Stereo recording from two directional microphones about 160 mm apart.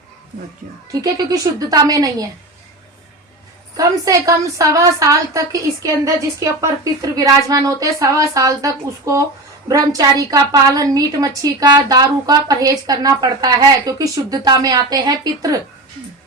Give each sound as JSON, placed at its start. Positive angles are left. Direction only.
{"t": 0.9, "sound": "a woman's voice", "side_deg": -20}
{"t": 3.8, "sound": "a woman's voice", "side_deg": -20}